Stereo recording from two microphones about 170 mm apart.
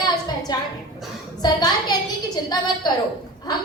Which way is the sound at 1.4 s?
25° left (ahead or behind).